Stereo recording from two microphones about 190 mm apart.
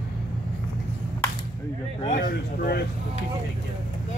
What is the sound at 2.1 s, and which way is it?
Speech, 50° left (ahead or behind).